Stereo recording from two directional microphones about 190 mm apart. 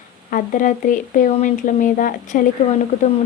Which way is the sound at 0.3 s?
45° left (ahead or behind).